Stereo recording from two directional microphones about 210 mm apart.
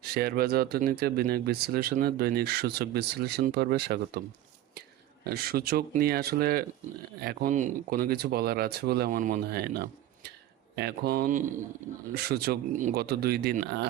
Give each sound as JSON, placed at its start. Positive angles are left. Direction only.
{"t": 0.0, "sound": "speech", "side_deg": -50}
{"t": 5.2, "sound": "speech", "side_deg": -45}